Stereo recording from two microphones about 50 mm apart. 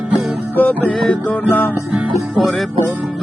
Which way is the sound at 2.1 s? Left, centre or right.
Centre.